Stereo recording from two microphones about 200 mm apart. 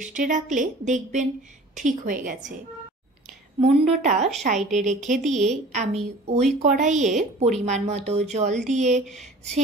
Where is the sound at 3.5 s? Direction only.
30° right (ahead or behind).